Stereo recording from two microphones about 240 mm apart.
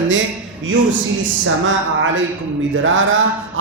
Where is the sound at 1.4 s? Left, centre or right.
Right.